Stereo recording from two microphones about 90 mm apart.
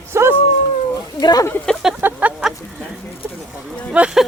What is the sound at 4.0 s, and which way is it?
Speech, 15° right (ahead or behind).